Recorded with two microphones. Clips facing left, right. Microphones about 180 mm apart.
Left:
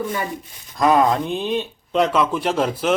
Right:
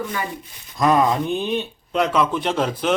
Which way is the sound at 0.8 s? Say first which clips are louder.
Left 1 dB; centre (ahead or behind).